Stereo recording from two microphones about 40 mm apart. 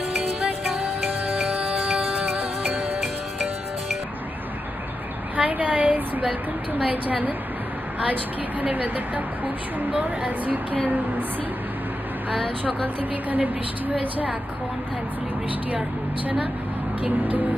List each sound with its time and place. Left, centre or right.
2.0 s music: centre
5.3 s a sound: right
6.9 s a woman's voice: right
12.8 s a woman's voice: right